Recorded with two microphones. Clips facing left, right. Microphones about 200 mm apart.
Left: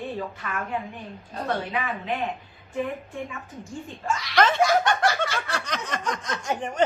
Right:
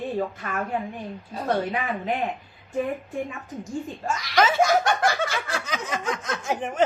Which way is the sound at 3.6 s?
40° right (ahead or behind).